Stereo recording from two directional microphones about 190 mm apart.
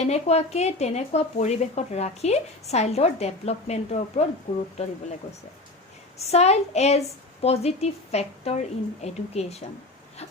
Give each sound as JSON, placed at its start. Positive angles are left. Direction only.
{"t": 0.0, "sound": "speech", "side_deg": 35}
{"t": 6.1, "sound": "speech", "side_deg": 35}